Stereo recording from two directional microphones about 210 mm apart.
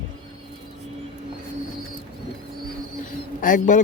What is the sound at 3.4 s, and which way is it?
Speech, 40° left (ahead or behind).